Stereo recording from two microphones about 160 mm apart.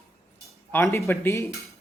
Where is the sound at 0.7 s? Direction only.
20° left (ahead or behind).